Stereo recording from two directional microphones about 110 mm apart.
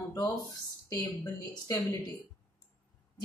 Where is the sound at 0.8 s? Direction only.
30° left (ahead or behind).